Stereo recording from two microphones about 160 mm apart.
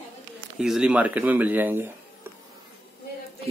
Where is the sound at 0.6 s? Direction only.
5° right (ahead or behind).